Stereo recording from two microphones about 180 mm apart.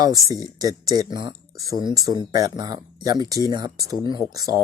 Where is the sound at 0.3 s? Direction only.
20° right (ahead or behind).